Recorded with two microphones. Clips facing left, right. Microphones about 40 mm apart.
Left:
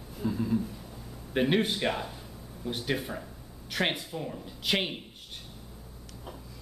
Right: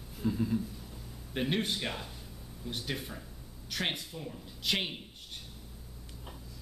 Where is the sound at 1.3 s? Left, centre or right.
Centre.